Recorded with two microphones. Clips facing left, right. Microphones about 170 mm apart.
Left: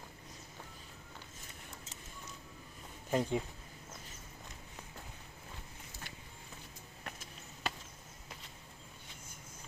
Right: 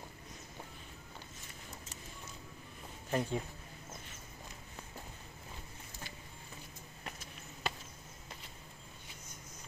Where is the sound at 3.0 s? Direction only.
15° left (ahead or behind).